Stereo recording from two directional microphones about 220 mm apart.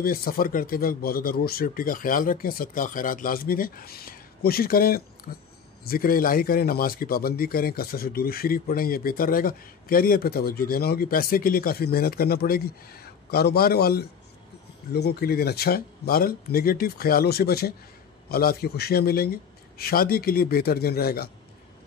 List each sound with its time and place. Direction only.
0.0 s speech: 40° left (ahead or behind)